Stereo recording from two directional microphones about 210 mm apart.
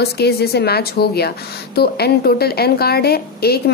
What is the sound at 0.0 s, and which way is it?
A woman's voice, 50° left (ahead or behind).